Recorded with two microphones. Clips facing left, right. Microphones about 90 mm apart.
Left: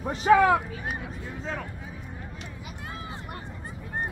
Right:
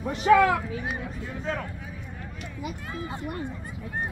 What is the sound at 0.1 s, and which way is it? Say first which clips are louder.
Speech: even; 30° left (ahead or behind).